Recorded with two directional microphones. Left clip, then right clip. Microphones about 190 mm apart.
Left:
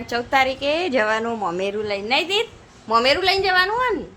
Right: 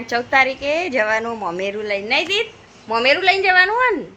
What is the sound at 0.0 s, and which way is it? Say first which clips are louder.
A woman's voice: right 3 dB; 5° left (ahead or behind).